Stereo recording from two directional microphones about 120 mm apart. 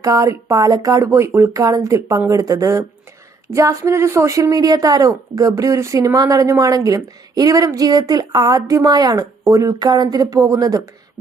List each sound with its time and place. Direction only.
0.0 s speech: 25° right (ahead or behind)